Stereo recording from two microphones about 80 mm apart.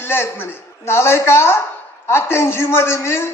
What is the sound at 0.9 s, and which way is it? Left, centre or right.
A man's voice, left.